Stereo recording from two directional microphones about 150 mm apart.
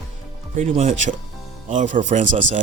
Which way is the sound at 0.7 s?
50° right (ahead or behind).